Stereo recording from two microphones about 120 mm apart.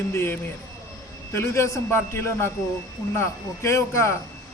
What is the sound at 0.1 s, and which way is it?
Speech, 20° left (ahead or behind).